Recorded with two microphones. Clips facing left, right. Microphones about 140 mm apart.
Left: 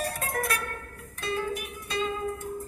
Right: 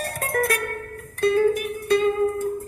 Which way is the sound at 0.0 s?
55° right (ahead or behind).